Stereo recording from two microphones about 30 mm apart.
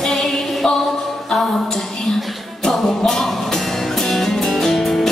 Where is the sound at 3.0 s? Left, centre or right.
Centre.